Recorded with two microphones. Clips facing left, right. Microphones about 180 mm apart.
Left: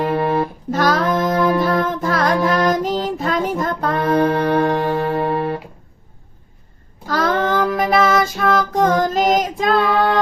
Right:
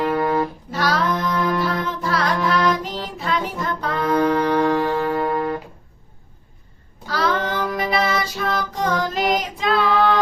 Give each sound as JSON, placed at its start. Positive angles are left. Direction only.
{"t": 0.1, "sound": "music", "side_deg": 25}
{"t": 0.7, "sound": "child singing", "side_deg": 45}
{"t": 1.5, "sound": "music", "side_deg": 50}
{"t": 5.0, "sound": "music", "side_deg": 25}
{"t": 7.1, "sound": "child singing", "side_deg": 50}